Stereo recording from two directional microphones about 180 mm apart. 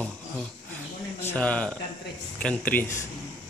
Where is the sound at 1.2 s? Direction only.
5° left (ahead or behind).